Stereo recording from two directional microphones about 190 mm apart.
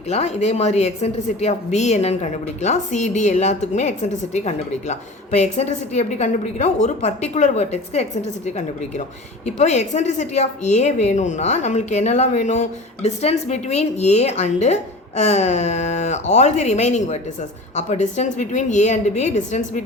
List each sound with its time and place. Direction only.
0.1 s a woman's voice: 35° left (ahead or behind)